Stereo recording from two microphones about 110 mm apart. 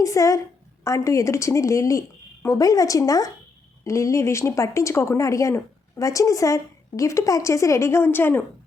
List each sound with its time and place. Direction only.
0.0 s a woman's voice: 30° left (ahead or behind)